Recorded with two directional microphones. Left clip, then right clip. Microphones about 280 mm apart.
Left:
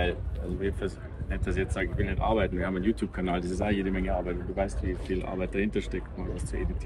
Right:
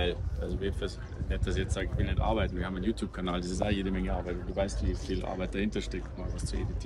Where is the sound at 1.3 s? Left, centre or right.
Centre.